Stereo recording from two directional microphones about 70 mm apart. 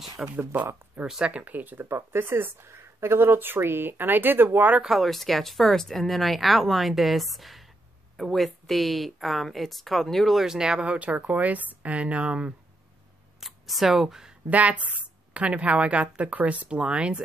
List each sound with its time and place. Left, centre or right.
0.4 s speech: right
1.0 s a woman's voice: centre
1.4 s speech: right
4.8 s speech: centre
10.4 s speech: centre
13.4 s speech: centre
14.5 s a woman's voice: right